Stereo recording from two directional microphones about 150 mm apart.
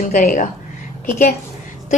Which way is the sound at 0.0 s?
60° left (ahead or behind).